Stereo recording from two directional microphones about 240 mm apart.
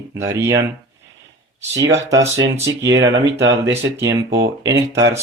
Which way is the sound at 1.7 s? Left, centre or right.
Right.